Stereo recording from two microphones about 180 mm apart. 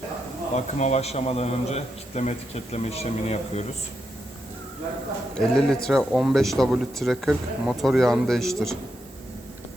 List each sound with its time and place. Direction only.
0.5 s a man's voice: 40° left (ahead or behind)
5.4 s speech: 5° left (ahead or behind)